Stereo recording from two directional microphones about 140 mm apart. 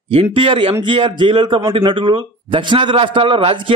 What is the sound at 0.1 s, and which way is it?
Speech, 40° right (ahead or behind).